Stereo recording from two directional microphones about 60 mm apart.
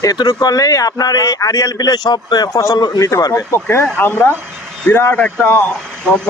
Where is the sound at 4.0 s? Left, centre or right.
Left.